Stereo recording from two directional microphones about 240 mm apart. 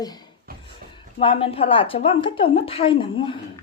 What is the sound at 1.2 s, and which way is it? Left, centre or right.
A woman's voice, left.